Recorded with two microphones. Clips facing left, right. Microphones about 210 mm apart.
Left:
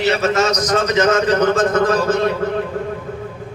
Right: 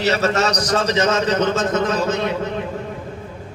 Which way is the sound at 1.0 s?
50° left (ahead or behind).